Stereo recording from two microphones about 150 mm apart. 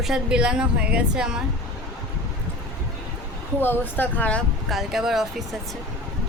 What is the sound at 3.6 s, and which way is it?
A woman's voice, 15° left (ahead or behind).